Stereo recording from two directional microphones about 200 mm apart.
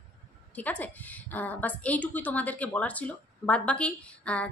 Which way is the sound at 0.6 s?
10° left (ahead or behind).